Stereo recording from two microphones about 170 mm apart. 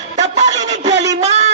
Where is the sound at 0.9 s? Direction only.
90° right.